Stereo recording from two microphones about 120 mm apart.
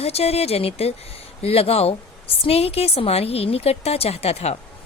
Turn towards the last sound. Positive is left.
turn(degrees=60)  # may be behind; listen again after turning